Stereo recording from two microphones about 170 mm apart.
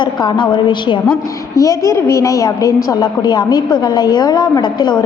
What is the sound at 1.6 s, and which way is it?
A woman's voice, 20° left (ahead or behind).